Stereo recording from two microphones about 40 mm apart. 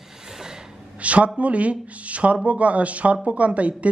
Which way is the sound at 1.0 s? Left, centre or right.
Right.